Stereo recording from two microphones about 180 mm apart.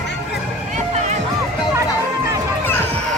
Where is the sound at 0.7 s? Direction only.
40° right (ahead or behind).